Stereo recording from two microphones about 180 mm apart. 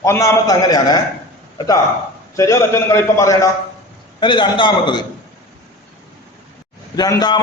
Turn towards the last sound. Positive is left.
turn(degrees=20)  # may be behind; listen again after turning